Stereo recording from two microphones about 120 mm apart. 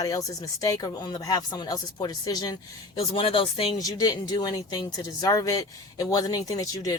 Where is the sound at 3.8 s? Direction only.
30° left (ahead or behind).